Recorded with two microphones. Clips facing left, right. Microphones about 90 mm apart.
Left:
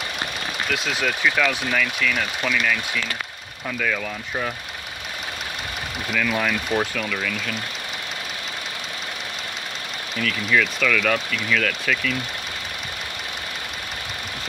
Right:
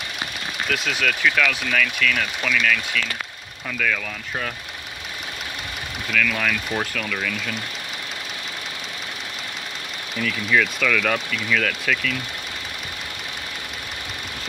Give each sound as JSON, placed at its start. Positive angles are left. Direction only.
{"t": 0.7, "sound": "speech", "side_deg": 10}
{"t": 6.1, "sound": "speech", "side_deg": 20}
{"t": 6.7, "sound": "speech", "side_deg": 5}
{"t": 10.2, "sound": "speech", "side_deg": -5}